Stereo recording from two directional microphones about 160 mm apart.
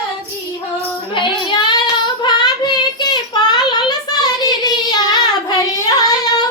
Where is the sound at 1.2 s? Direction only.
30° left (ahead or behind).